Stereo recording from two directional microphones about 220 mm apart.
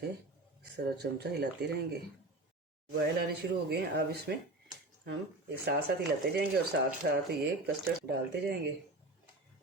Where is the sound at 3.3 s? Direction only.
45° right (ahead or behind).